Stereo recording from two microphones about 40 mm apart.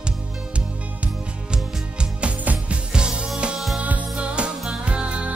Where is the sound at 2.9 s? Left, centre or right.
Right.